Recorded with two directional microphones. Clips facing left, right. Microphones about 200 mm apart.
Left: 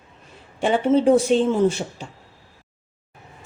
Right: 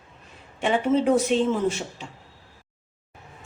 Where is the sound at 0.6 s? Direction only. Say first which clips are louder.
Left 4 dB; 35° left (ahead or behind).